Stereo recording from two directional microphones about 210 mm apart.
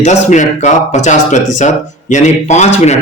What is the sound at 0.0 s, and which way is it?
Speech, 35° left (ahead or behind).